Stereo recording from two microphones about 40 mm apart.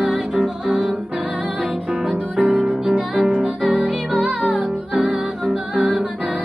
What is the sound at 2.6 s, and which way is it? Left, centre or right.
Music, right.